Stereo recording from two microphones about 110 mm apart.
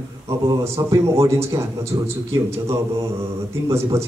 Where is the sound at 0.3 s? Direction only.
30° right (ahead or behind).